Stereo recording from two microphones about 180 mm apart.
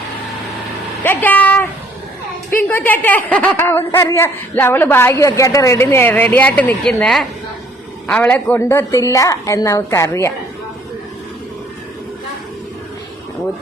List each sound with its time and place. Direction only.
1.0 s speech: 10° left (ahead or behind)